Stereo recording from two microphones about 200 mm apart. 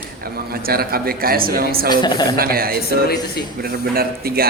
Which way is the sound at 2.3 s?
50° right (ahead or behind).